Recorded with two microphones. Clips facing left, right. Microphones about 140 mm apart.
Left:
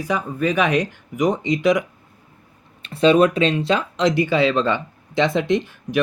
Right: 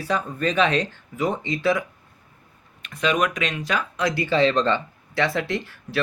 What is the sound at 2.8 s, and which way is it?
Speech, 30° left (ahead or behind).